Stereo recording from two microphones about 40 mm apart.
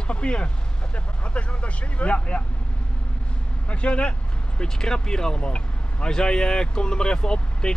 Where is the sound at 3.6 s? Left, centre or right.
Left.